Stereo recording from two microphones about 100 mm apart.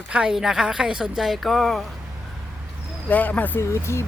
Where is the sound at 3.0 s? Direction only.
15° left (ahead or behind).